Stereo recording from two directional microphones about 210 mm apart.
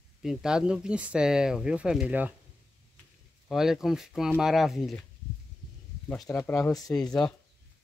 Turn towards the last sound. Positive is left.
turn(degrees=5)  # may be behind; listen again after turning